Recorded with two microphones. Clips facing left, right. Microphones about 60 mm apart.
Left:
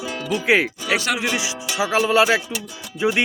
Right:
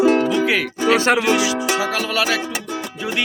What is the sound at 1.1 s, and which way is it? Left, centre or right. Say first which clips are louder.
Speech: right 7 dB; right.